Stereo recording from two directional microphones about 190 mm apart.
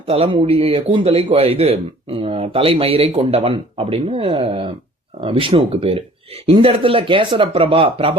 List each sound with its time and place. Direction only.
0.1 s speech: 30° right (ahead or behind)